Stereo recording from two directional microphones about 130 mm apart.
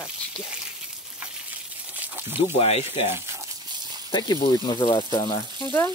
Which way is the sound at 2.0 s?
15° right (ahead or behind).